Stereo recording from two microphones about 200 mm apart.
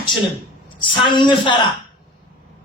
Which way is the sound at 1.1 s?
25° left (ahead or behind).